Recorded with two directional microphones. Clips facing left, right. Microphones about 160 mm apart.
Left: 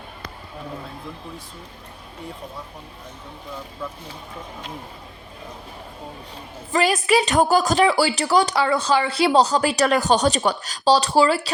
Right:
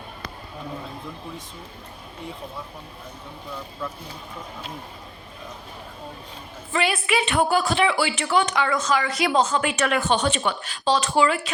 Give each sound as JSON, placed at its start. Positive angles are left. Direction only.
{"t": 6.7, "sound": "a woman's voice", "side_deg": 40}